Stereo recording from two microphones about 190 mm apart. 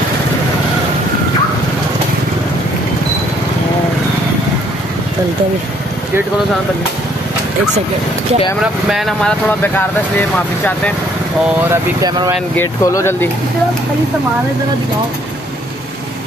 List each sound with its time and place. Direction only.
8.8 s speech: centre (ahead or behind)
11.7 s speech: 20° right (ahead or behind)
12.5 s speech: 15° left (ahead or behind)